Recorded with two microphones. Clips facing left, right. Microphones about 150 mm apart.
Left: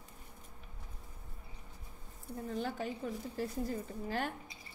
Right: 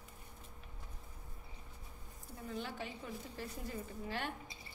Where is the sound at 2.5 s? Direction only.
40° left (ahead or behind).